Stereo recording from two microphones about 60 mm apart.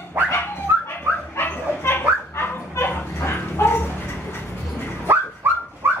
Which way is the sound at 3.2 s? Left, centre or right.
Left.